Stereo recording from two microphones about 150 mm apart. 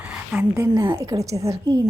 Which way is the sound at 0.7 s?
25° right (ahead or behind).